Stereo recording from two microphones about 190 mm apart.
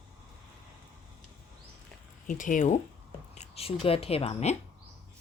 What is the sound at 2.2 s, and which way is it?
A woman's voice, 45° left (ahead or behind).